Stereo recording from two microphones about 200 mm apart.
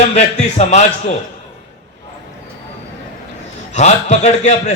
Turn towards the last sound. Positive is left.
turn(degrees=35)  # may be behind; listen again after turning